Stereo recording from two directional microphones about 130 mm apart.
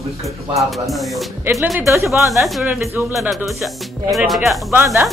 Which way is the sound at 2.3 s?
Centre (ahead or behind).